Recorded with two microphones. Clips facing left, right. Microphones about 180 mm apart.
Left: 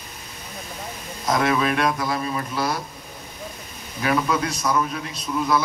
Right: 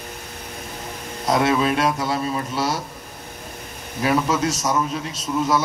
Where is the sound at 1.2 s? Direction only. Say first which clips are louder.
Right 2 dB; 30° right (ahead or behind).